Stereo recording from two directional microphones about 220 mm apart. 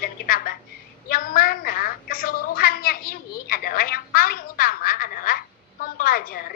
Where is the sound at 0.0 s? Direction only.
40° left (ahead or behind).